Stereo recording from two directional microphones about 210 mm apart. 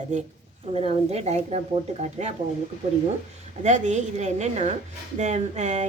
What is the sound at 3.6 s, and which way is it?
A woman's voice, 35° right (ahead or behind).